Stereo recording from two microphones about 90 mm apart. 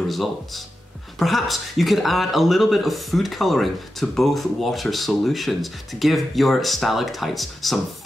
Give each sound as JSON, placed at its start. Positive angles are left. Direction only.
{"t": 1.2, "sound": "speech", "side_deg": 0}